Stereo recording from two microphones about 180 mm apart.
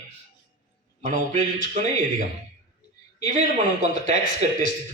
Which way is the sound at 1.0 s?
45° right (ahead or behind).